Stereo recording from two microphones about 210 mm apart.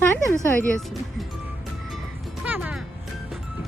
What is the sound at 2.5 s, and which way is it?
Music, 10° right (ahead or behind).